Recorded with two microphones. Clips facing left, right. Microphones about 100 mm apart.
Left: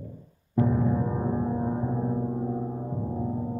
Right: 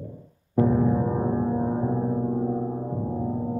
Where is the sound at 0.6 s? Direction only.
20° right (ahead or behind).